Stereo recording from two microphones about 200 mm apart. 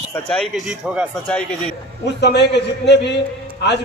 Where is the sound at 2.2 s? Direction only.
55° left (ahead or behind).